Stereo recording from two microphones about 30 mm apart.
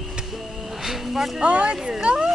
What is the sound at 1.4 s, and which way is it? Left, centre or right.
Speech, right.